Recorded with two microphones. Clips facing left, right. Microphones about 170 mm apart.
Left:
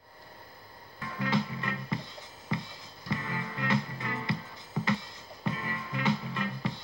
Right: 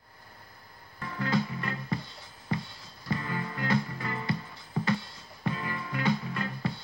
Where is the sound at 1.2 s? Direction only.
35° right (ahead or behind).